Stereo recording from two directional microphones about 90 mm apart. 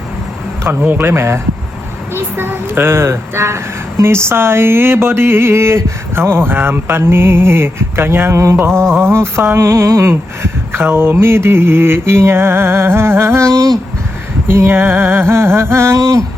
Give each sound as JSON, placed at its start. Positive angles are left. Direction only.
{"t": 0.6, "sound": "speech", "side_deg": -25}
{"t": 14.4, "sound": "speech", "side_deg": -25}